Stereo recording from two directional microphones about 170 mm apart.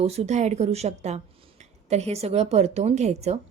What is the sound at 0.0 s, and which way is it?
A woman's voice, 40° right (ahead or behind).